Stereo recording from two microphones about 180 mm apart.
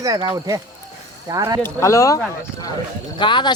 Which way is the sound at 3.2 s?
25° left (ahead or behind).